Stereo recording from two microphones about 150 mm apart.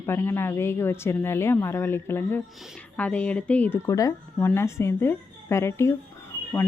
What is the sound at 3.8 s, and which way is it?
Speech, 20° left (ahead or behind).